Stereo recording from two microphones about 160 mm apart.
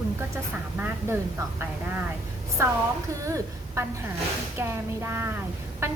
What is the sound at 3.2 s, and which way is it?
A woman's voice, 20° right (ahead or behind).